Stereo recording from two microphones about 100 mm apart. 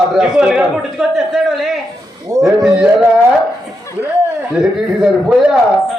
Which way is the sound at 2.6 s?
5° right (ahead or behind).